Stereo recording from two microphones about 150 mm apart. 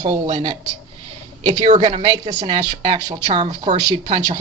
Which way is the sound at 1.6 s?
40° right (ahead or behind).